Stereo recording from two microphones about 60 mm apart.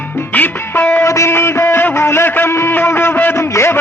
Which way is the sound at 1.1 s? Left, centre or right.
Left.